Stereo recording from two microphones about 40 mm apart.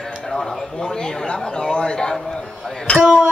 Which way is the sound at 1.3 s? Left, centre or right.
Left.